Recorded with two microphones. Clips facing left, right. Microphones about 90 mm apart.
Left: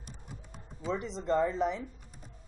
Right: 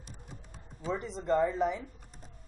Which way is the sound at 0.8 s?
Centre (ahead or behind).